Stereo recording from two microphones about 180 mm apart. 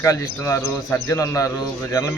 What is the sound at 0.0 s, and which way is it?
A man's voice, 15° left (ahead or behind).